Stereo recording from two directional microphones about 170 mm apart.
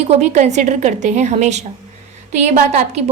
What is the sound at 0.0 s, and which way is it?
A woman's voice, 40° right (ahead or behind).